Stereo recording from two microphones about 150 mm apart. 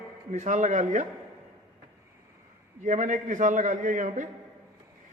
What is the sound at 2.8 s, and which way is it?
A man's voice, 55° right (ahead or behind).